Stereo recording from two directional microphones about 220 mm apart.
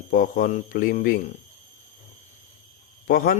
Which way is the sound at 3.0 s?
40° left (ahead or behind).